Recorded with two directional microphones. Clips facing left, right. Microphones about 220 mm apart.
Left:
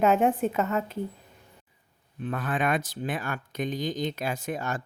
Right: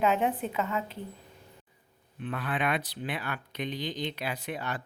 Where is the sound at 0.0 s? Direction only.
45° left (ahead or behind).